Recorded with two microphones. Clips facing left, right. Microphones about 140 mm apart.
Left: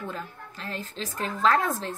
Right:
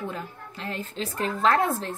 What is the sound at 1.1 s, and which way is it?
Speech, 30° right (ahead or behind).